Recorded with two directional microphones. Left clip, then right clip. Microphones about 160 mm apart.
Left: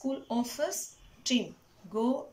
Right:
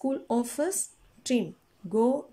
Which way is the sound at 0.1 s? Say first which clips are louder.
Right 5 dB; 45° right (ahead or behind).